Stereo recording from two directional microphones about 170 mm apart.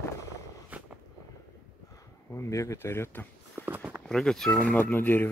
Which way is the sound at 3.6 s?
10° right (ahead or behind).